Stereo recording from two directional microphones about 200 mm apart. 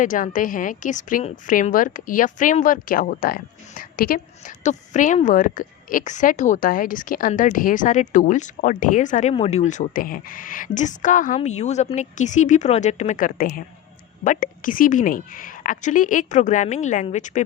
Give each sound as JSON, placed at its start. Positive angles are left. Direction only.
{"t": 0.0, "sound": "a woman's voice", "side_deg": 40}